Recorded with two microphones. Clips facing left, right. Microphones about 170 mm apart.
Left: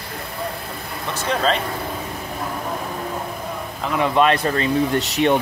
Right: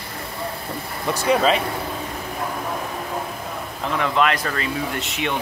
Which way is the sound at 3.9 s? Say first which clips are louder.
Left 3 dB; 20° left (ahead or behind).